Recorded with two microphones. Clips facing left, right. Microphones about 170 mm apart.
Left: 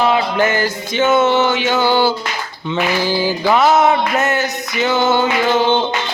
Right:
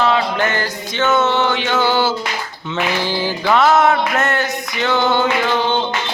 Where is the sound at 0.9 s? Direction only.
10° left (ahead or behind).